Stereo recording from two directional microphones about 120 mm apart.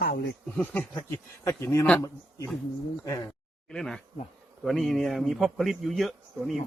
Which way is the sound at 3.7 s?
5° left (ahead or behind).